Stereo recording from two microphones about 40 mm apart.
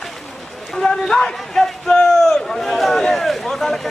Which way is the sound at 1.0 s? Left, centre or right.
Centre.